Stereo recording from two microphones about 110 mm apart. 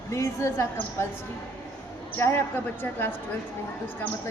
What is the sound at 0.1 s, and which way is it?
Speech, 25° left (ahead or behind).